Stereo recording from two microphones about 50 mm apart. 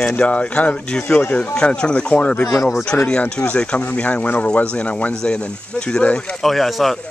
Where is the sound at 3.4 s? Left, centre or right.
Left.